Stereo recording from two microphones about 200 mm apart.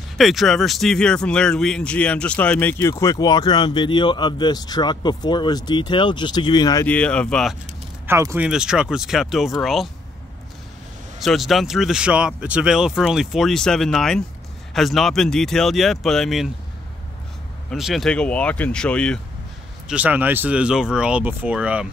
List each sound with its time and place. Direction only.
0.2 s speech: centre (ahead or behind)
8.1 s speech: 15° right (ahead or behind)
11.1 s speech: centre (ahead or behind)
17.6 s speech: centre (ahead or behind)
19.9 s speech: 10° right (ahead or behind)